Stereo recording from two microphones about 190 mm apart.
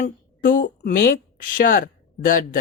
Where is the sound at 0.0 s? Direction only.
45° left (ahead or behind).